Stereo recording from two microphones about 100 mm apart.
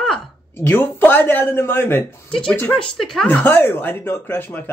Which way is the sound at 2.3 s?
10° left (ahead or behind).